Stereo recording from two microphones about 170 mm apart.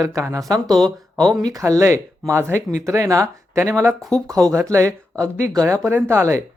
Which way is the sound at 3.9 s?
Centre (ahead or behind).